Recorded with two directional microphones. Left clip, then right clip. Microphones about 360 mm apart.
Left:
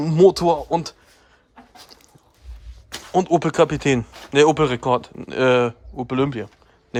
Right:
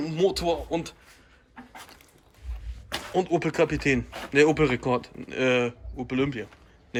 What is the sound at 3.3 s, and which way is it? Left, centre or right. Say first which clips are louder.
Speech: left 7 dB; left.